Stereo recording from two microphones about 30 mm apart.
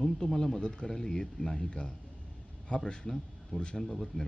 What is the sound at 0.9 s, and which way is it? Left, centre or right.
Speech, centre.